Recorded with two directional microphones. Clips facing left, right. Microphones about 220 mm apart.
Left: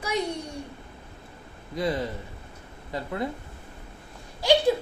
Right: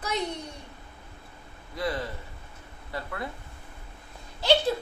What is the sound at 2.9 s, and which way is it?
Speech, 20° left (ahead or behind).